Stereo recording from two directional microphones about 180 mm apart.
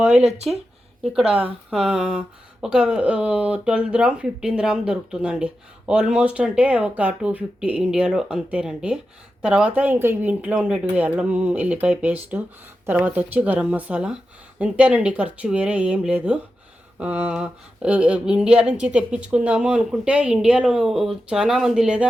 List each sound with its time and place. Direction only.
0.2 s speech: 40° right (ahead or behind)
1.1 s speech: 5° right (ahead or behind)